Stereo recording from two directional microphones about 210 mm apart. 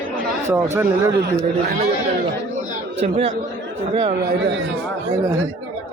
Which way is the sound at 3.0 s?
30° right (ahead or behind).